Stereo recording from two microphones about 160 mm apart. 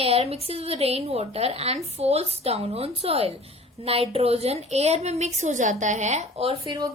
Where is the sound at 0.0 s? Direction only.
40° right (ahead or behind).